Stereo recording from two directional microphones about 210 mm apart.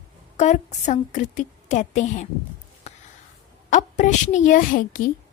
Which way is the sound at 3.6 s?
35° left (ahead or behind).